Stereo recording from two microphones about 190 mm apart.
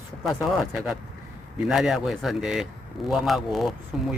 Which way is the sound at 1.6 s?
Centre (ahead or behind).